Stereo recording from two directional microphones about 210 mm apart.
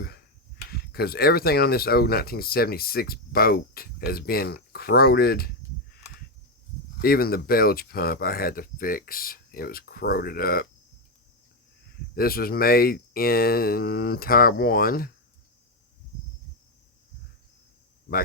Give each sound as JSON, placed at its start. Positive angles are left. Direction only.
{"t": 0.7, "sound": "speech", "side_deg": 50}
{"t": 7.0, "sound": "speech", "side_deg": 45}
{"t": 12.1, "sound": "speech", "side_deg": 45}